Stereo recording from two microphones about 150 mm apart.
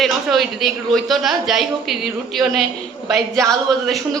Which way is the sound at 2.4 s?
25° right (ahead or behind).